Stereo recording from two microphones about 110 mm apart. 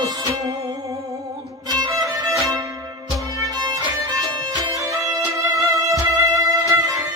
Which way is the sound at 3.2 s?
35° right (ahead or behind).